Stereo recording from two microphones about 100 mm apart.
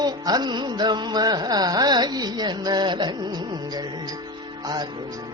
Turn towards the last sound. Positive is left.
turn(degrees=-45)  # may be behind; listen again after turning